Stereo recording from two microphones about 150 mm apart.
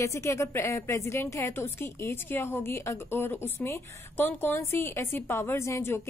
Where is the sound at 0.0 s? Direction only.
20° left (ahead or behind).